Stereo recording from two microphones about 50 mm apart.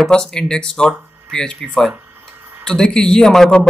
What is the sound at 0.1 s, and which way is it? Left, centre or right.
Speech, centre.